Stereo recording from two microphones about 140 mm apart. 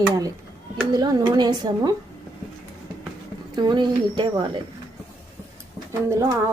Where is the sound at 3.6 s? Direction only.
30° right (ahead or behind).